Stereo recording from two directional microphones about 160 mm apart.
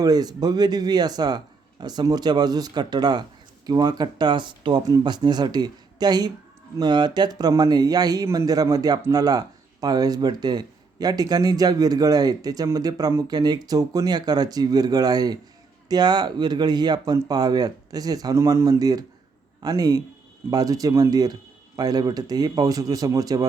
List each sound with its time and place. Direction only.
0.0 s speech: 25° right (ahead or behind)